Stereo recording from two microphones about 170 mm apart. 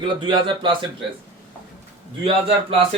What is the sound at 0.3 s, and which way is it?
Speech, 30° right (ahead or behind).